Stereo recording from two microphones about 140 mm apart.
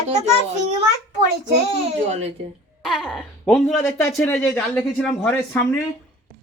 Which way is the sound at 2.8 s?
Centre (ahead or behind).